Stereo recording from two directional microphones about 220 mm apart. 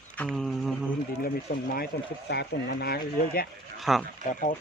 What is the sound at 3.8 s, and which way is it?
Speech, centre (ahead or behind).